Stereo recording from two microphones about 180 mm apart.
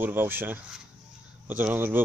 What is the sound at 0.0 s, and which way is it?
Speech, 10° right (ahead or behind).